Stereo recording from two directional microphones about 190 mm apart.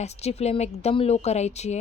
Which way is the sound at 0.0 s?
35° left (ahead or behind).